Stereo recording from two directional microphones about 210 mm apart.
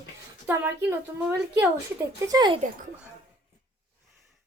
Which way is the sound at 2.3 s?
20° right (ahead or behind).